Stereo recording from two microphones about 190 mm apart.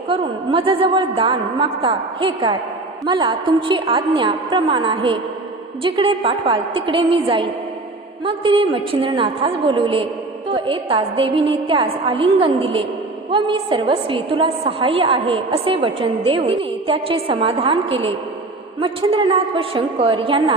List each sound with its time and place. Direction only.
0.1 s a woman's voice: 30° right (ahead or behind)